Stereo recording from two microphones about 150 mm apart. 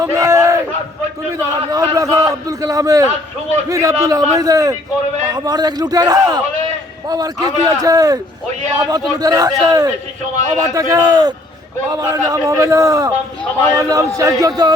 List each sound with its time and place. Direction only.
0.0 s battle cry: 20° right (ahead or behind)
1.7 s a man's voice: 25° right (ahead or behind)